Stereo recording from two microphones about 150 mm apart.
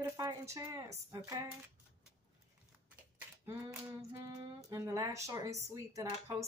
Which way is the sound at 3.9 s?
20° right (ahead or behind).